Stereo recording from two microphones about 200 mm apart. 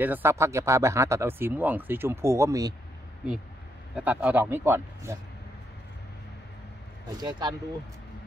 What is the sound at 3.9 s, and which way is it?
Speech, 5° right (ahead or behind).